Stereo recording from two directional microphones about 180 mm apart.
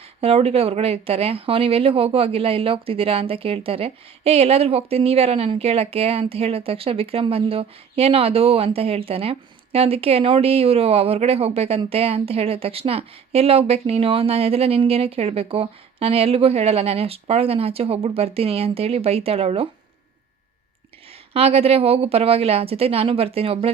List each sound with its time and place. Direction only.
0.2 s speech: 30° right (ahead or behind)
21.3 s speech: 35° right (ahead or behind)